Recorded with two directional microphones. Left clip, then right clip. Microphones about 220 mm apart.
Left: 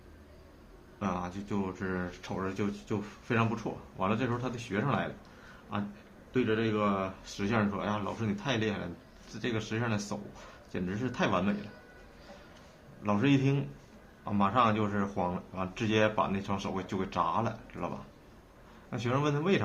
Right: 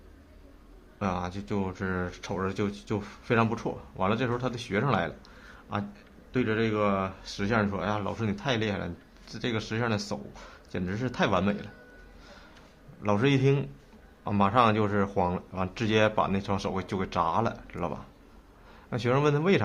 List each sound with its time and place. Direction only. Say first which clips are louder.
0.9 s speech: right 4 dB; 40° right (ahead or behind)
13.0 s speech: right 3 dB; 45° right (ahead or behind)